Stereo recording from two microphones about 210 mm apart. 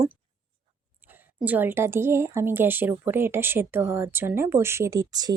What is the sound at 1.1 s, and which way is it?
Speech, 10° right (ahead or behind).